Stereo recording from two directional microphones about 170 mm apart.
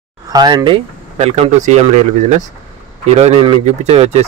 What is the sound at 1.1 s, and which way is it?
Speech, 40° right (ahead or behind).